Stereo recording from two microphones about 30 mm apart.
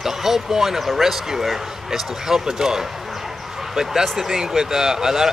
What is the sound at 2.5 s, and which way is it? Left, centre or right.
Speech, centre.